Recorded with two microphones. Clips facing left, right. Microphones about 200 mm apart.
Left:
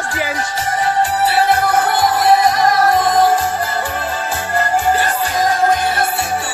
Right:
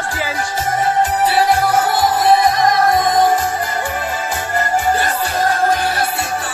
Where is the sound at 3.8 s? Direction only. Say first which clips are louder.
Even; 10° right (ahead or behind).